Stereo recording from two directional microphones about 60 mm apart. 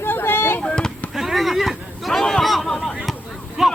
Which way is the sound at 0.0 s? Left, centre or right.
Left.